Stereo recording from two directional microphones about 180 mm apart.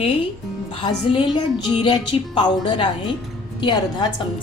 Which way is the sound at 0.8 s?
25° left (ahead or behind).